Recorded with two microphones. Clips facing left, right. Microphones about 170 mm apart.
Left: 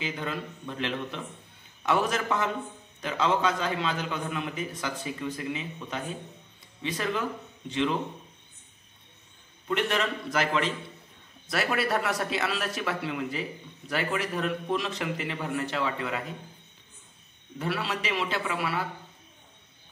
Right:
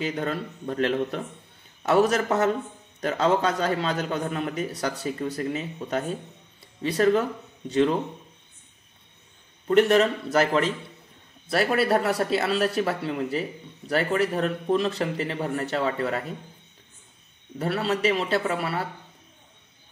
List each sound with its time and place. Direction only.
0.0 s speech: 40° right (ahead or behind)
9.7 s speech: 40° right (ahead or behind)
17.6 s speech: 35° right (ahead or behind)